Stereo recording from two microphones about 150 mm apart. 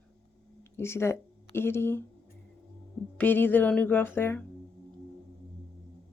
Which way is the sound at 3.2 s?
15° left (ahead or behind).